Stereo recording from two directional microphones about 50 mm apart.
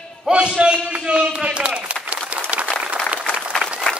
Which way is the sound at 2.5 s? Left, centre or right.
Right.